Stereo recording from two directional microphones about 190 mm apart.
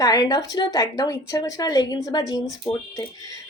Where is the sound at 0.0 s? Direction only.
20° left (ahead or behind).